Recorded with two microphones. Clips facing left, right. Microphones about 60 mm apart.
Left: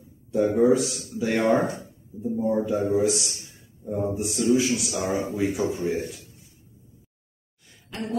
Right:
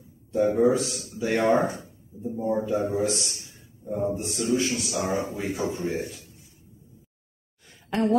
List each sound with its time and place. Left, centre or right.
0.3 s speech: centre
7.9 s speech: right